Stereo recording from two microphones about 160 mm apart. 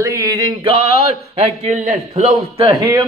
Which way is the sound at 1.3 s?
40° right (ahead or behind).